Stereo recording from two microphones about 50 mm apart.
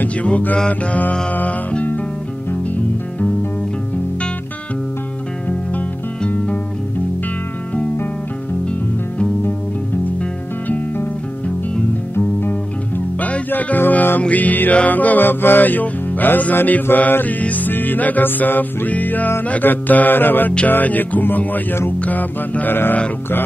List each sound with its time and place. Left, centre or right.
0.0 s music: left
5.5 s music: left
11.4 s music: left
12.4 s music: left